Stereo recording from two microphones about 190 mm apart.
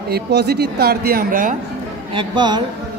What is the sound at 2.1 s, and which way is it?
Speech, 25° right (ahead or behind).